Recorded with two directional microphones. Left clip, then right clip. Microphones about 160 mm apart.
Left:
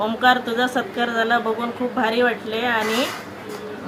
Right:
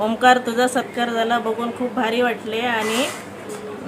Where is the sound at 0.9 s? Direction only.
15° right (ahead or behind).